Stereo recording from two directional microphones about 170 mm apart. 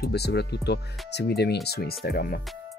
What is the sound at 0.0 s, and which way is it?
Speech, 75° left (ahead or behind).